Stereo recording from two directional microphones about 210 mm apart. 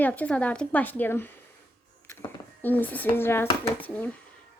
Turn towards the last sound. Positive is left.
turn(degrees=10)  # may be behind; listen again after turning